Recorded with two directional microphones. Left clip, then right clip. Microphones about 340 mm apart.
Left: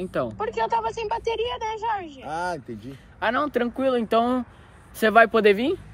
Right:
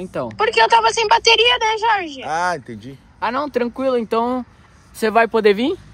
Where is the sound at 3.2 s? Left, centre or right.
Centre.